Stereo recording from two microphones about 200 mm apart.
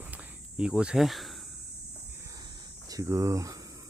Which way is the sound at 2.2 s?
15° right (ahead or behind).